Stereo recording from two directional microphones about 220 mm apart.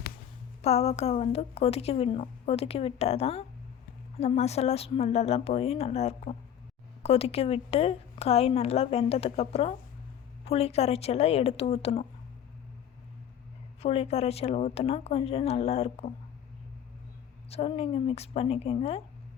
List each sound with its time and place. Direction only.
0.6 s a woman's voice: 30° left (ahead or behind)
13.8 s a woman's voice: 30° left (ahead or behind)
17.5 s a woman's voice: 25° left (ahead or behind)